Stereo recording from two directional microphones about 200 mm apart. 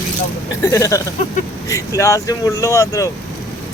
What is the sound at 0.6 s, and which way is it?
Speech, 15° left (ahead or behind).